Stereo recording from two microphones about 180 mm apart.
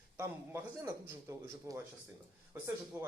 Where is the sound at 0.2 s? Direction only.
15° right (ahead or behind).